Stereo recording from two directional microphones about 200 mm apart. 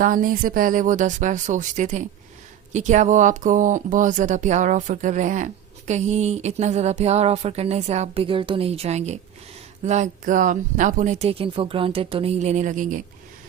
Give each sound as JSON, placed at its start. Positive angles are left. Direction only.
{"t": 0.0, "sound": "speech", "side_deg": -45}